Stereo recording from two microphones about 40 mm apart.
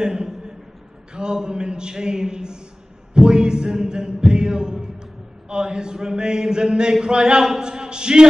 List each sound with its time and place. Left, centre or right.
0.0 s a man's voice: centre
3.2 s a sound: right
5.5 s speech: right